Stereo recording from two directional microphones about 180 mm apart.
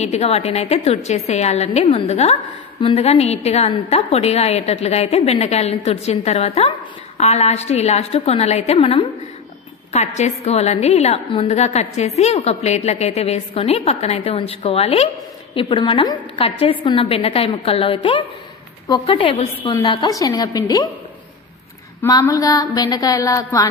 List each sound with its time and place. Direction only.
0.0 s a woman's voice: 35° left (ahead or behind); by 20.9 s 20° left (ahead or behind)
22.0 s a woman's voice: 20° left (ahead or behind)